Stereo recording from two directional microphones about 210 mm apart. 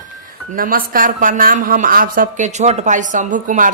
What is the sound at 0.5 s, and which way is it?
A woman's voice, 40° right (ahead or behind).